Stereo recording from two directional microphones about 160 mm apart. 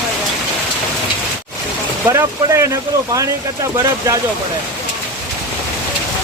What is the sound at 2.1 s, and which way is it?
Speech, 20° right (ahead or behind).